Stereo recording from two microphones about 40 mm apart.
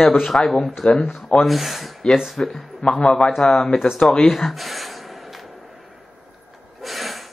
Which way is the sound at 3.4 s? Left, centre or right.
Centre.